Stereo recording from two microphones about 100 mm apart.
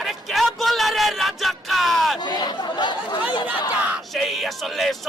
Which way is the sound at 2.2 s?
45° left (ahead or behind).